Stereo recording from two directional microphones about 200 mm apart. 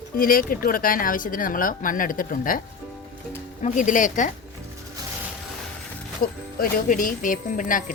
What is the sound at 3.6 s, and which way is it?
Speech, 40° left (ahead or behind).